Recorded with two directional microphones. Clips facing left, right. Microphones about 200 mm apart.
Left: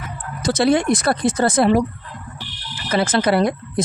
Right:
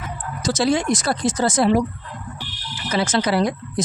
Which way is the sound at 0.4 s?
60° left (ahead or behind).